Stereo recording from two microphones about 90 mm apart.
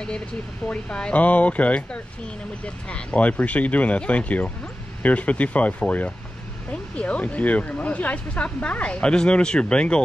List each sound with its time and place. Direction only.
0.7 s speech: 10° left (ahead or behind)